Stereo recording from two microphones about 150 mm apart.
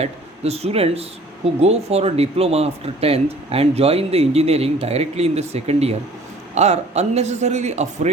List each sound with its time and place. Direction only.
0.0 s speech: 45° right (ahead or behind)